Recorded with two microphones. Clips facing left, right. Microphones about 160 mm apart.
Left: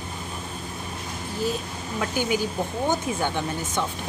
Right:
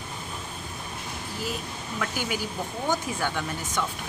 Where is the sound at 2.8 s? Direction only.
25° left (ahead or behind).